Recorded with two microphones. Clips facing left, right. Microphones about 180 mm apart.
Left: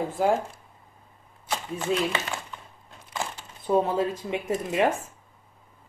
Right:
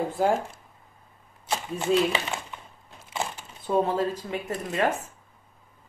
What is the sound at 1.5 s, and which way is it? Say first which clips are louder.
Speech: right 3 dB; 15° right (ahead or behind).